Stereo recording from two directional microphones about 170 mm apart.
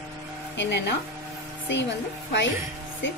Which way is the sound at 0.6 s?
90° left.